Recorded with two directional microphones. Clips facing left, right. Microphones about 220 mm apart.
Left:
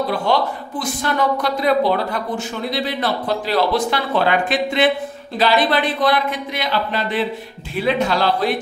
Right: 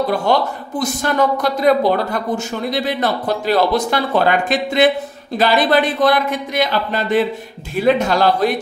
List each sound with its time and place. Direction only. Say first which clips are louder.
0.3 s speech: right 2 dB; 45° right (ahead or behind)